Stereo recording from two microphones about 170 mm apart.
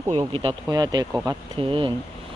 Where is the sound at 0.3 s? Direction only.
30° right (ahead or behind).